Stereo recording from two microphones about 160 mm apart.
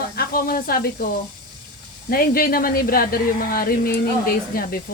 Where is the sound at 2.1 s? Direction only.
65° left (ahead or behind).